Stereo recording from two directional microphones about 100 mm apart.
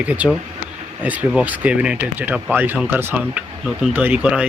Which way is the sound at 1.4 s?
15° right (ahead or behind).